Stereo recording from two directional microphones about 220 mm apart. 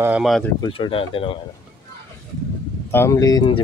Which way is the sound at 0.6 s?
25° left (ahead or behind).